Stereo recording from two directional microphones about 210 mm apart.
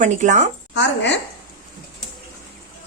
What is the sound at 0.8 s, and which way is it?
Speech, 55° left (ahead or behind).